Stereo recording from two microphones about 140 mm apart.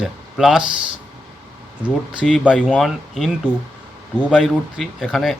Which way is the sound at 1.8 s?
5° right (ahead or behind).